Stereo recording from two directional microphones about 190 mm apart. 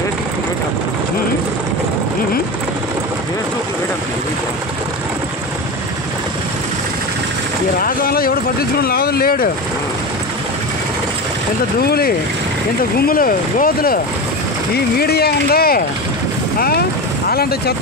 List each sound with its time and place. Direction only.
7.8 s speech: 50° left (ahead or behind)
11.8 s speech: 55° left (ahead or behind)
15.0 s speech: 55° left (ahead or behind)